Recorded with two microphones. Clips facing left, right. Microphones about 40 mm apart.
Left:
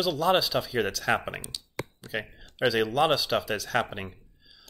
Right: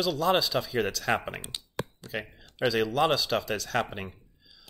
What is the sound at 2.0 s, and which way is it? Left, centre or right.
Speech, centre.